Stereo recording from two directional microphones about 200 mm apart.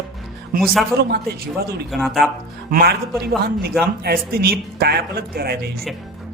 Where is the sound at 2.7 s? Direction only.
50° right (ahead or behind).